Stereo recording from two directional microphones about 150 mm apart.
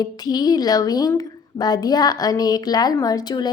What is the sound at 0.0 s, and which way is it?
Speech, 25° left (ahead or behind).